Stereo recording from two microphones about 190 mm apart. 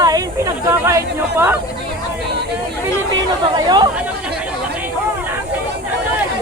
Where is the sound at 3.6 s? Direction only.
25° right (ahead or behind).